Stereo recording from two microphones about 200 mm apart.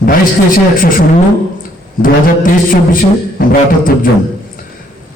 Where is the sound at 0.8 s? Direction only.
45° left (ahead or behind).